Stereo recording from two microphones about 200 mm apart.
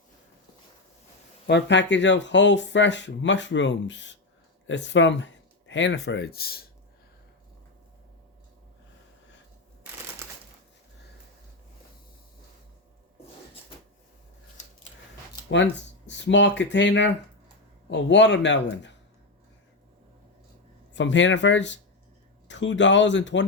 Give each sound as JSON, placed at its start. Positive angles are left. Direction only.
{"t": 1.5, "sound": "speech", "side_deg": 60}
{"t": 16.0, "sound": "speech", "side_deg": 65}
{"t": 20.9, "sound": "speech", "side_deg": 65}